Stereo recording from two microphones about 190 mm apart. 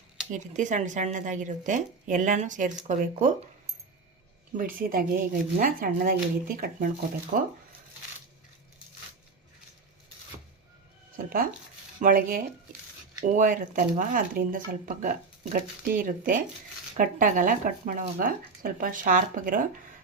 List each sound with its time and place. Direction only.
0.2 s a sound: 5° right (ahead or behind)
0.5 s a woman's voice: 40° right (ahead or behind)
4.5 s speech: 45° right (ahead or behind)
11.9 s speech: 45° right (ahead or behind)